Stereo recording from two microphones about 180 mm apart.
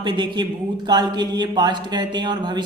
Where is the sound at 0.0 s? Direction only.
25° right (ahead or behind).